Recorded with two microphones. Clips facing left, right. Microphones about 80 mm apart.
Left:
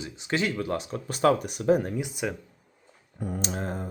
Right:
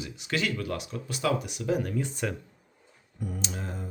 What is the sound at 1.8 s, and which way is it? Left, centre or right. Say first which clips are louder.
Speech: left 1 dB; centre.